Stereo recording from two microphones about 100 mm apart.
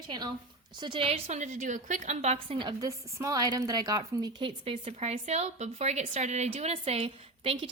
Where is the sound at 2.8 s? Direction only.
35° right (ahead or behind).